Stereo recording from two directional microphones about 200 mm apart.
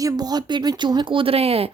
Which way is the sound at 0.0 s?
20° right (ahead or behind).